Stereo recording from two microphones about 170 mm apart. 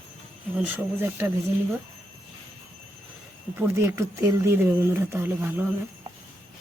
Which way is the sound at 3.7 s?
15° right (ahead or behind).